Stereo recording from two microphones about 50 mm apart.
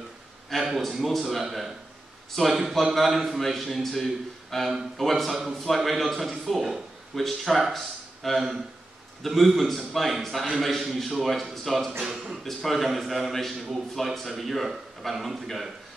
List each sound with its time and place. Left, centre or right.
0.5 s a man's voice: centre